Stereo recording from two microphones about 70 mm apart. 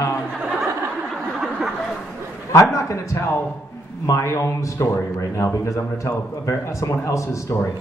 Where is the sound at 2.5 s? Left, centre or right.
Left.